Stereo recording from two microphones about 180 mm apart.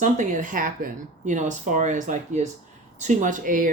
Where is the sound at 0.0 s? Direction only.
45° right (ahead or behind).